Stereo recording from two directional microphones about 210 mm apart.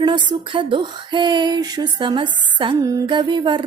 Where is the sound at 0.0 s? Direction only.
20° right (ahead or behind).